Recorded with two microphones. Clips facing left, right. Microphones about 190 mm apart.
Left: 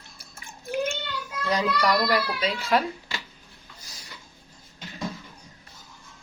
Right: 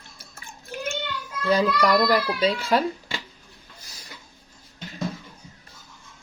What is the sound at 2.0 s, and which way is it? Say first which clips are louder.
Speech: right 4 dB; 35° right (ahead or behind).